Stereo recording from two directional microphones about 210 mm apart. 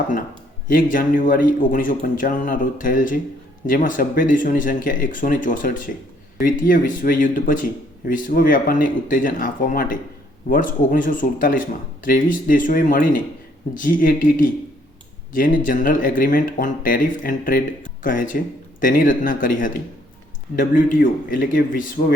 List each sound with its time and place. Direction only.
0.7 s a man's voice: 40° left (ahead or behind)